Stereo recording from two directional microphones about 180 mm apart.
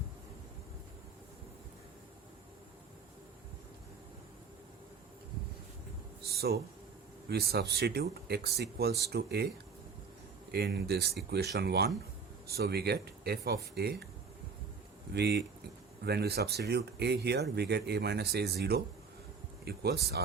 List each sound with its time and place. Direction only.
6.2 s a sound: 60° right (ahead or behind)
7.3 s speech: 60° right (ahead or behind)
10.5 s speech: 65° right (ahead or behind)
15.1 s speech: 65° right (ahead or behind)